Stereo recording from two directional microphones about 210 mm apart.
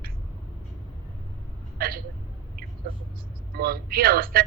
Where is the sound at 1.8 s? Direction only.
45° right (ahead or behind).